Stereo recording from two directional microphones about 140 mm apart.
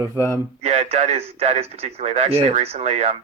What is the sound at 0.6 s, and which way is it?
Speech, 50° right (ahead or behind).